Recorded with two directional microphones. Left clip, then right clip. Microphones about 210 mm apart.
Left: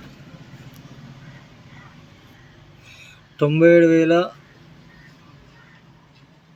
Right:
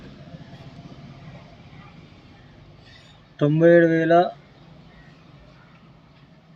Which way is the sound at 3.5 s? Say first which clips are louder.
Left 3 dB; 20° left (ahead or behind).